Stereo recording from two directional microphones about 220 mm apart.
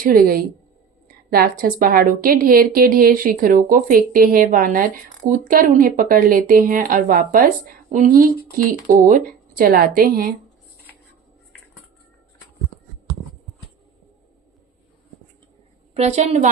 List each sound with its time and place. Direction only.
0.0 s a woman's voice: 40° right (ahead or behind)
16.0 s a woman's voice: 30° right (ahead or behind)